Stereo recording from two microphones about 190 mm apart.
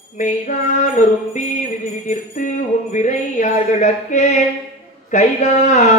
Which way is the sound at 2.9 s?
40° left (ahead or behind).